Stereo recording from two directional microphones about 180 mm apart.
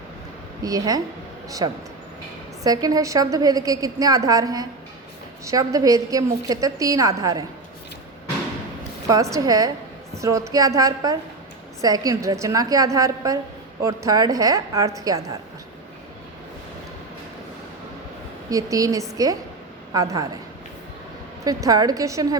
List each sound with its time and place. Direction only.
0.6 s a woman's voice: 20° right (ahead or behind)
9.0 s a woman's voice: 20° right (ahead or behind)
18.5 s a woman's voice: 20° right (ahead or behind)
21.4 s a woman's voice: 20° right (ahead or behind)